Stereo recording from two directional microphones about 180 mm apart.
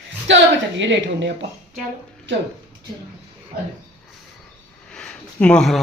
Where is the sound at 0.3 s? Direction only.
90° right.